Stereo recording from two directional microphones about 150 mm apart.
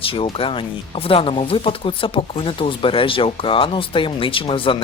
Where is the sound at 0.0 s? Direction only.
35° left (ahead or behind).